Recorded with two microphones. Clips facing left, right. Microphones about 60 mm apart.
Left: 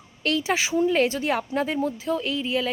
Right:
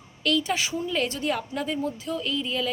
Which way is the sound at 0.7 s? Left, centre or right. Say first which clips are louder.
Left 6 dB; left.